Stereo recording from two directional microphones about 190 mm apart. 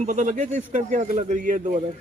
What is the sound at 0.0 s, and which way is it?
A man's voice, 40° right (ahead or behind).